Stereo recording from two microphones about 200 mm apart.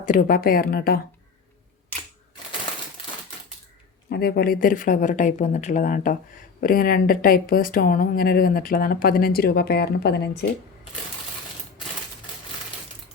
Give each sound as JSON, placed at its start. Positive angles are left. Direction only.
{"t": 0.0, "sound": "speech", "side_deg": 45}
{"t": 4.1, "sound": "speech", "side_deg": 50}